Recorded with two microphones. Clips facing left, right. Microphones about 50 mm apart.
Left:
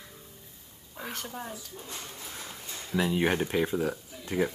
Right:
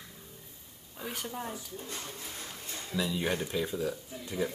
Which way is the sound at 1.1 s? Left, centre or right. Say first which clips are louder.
Right 1 dB; centre.